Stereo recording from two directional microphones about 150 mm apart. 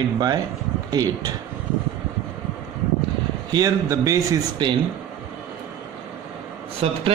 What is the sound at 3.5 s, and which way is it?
A man's voice, 25° right (ahead or behind).